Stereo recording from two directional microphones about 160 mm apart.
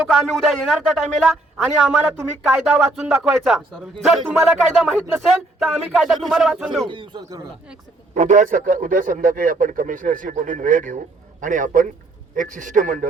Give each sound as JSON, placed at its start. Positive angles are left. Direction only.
{"t": 0.1, "sound": "a man's voice", "side_deg": 0}
{"t": 6.8, "sound": "speech", "side_deg": -30}
{"t": 8.1, "sound": "a man's voice", "side_deg": -50}